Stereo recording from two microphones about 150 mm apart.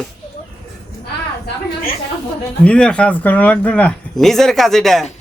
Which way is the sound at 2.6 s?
5° left (ahead or behind).